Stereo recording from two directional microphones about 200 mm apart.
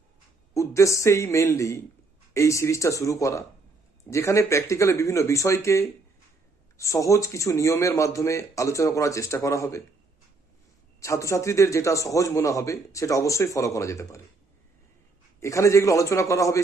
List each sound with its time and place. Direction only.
0.5 s a man's voice: 15° left (ahead or behind)
11.0 s a man's voice: 15° left (ahead or behind)
15.4 s a man's voice: 15° left (ahead or behind)